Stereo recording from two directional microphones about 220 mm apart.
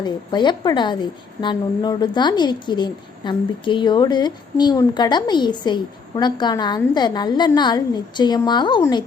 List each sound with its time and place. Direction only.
0.0 s a woman's voice: 20° left (ahead or behind)